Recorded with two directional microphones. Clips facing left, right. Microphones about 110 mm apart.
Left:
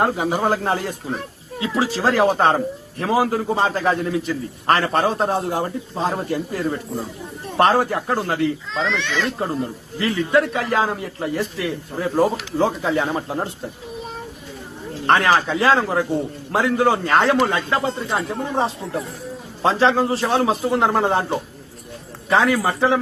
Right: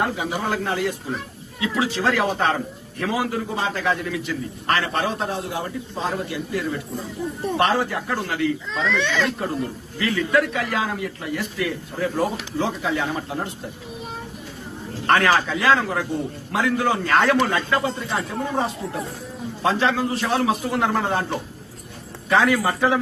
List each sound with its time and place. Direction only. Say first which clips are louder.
0.0 s a man's voice: left 5 dB; 40° left (ahead or behind)
15.0 s a man's voice: left 2 dB; 25° left (ahead or behind)